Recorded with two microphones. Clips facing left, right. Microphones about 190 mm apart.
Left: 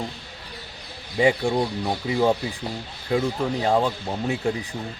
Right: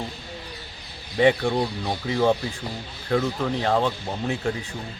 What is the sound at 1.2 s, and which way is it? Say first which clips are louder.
Speech: right 1 dB; 15° left (ahead or behind).